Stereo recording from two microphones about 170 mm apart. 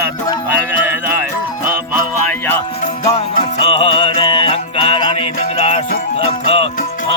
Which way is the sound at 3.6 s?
35° left (ahead or behind).